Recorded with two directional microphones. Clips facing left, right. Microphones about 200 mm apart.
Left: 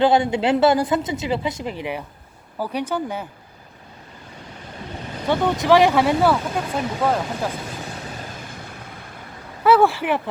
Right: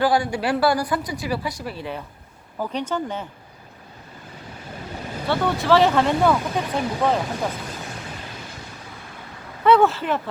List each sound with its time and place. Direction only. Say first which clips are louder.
0.0 s speech: left 3 dB; 20° left (ahead or behind)
5.3 s speech: left 2 dB; 15° left (ahead or behind)
9.6 s speech: left 1 dB; 10° left (ahead or behind)